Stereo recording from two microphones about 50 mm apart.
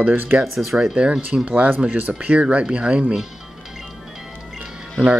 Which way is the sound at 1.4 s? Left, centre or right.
Right.